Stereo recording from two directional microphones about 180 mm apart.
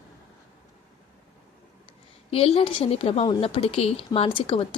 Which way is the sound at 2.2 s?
35° left (ahead or behind).